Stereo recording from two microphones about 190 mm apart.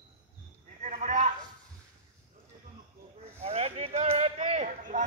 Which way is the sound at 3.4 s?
35° right (ahead or behind).